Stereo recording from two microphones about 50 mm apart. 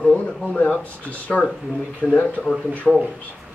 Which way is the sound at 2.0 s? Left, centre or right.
Left.